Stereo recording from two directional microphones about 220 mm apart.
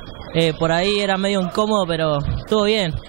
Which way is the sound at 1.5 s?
25° right (ahead or behind).